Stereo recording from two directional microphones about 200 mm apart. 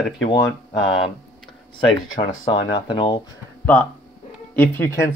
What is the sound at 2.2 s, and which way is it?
Speech, 30° left (ahead or behind).